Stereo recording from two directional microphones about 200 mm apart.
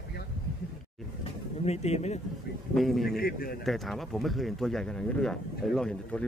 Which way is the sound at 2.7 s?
Centre (ahead or behind).